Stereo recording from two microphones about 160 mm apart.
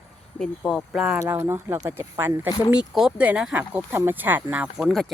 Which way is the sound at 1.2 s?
15° right (ahead or behind).